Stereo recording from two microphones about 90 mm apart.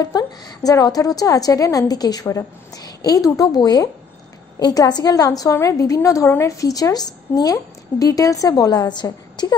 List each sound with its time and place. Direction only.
0.0 s a woman's voice: 45° left (ahead or behind)